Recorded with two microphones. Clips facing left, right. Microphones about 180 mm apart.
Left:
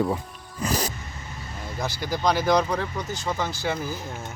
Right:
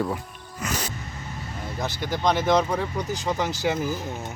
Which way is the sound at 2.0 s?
Centre (ahead or behind).